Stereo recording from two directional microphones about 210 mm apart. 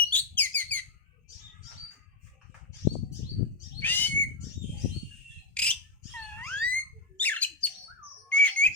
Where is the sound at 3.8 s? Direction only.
10° left (ahead or behind).